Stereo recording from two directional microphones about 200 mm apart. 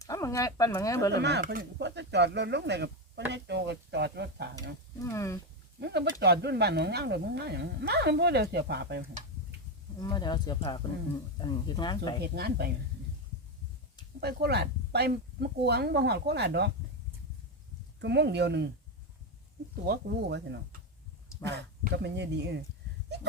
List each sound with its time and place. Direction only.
0.0 s speech: 15° left (ahead or behind)
1.1 s speech: 60° right (ahead or behind)
5.0 s speech: 15° left (ahead or behind)
5.8 s speech: 55° right (ahead or behind)
10.0 s speech: 20° left (ahead or behind)
12.2 s speech: 50° right (ahead or behind)
14.2 s speech: 55° right (ahead or behind)
18.0 s speech: 60° right (ahead or behind)
19.9 s speech: 50° right (ahead or behind)